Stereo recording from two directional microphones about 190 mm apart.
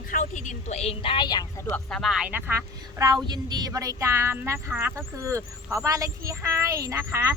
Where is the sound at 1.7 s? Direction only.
Centre (ahead or behind).